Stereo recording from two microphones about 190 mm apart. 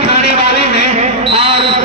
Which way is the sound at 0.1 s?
35° right (ahead or behind).